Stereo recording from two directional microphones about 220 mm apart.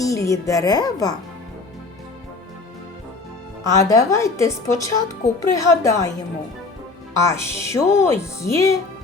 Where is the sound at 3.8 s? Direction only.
15° left (ahead or behind).